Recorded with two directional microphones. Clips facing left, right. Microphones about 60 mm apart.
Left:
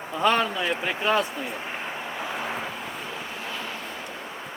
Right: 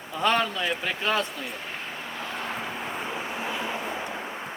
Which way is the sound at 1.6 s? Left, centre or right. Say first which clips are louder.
Left 3 dB; centre.